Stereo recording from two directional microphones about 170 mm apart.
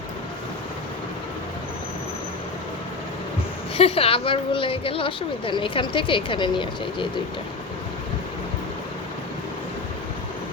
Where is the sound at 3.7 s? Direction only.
35° left (ahead or behind).